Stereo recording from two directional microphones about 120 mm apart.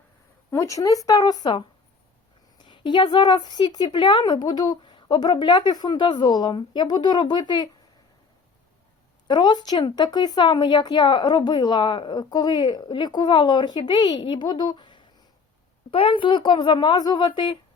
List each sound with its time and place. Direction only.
0.5 s a woman's voice: 25° left (ahead or behind)
9.2 s a woman's voice: 40° left (ahead or behind)